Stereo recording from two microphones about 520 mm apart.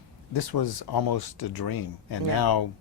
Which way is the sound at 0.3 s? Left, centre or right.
Left.